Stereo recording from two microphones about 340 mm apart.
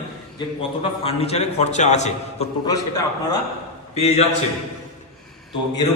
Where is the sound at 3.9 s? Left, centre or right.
Centre.